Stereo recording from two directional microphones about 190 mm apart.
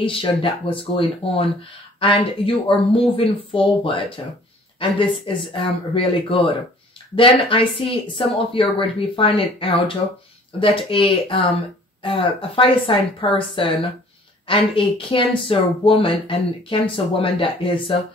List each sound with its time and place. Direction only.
0.0 s speech: 25° left (ahead or behind)